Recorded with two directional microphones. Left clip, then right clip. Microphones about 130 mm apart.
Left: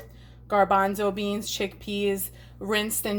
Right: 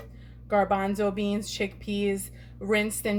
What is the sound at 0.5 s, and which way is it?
A woman's voice, 35° left (ahead or behind).